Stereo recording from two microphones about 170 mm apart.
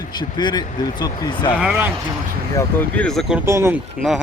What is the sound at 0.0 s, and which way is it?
Speech, 25° left (ahead or behind).